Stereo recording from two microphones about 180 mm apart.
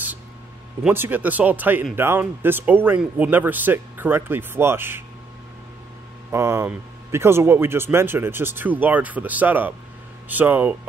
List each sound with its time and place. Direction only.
0.8 s speech: 10° right (ahead or behind)
6.3 s speech: 15° right (ahead or behind)